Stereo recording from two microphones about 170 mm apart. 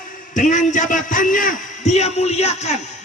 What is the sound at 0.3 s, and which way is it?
A man's voice, 45° left (ahead or behind).